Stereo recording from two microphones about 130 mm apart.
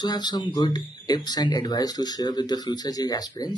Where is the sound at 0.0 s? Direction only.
30° left (ahead or behind).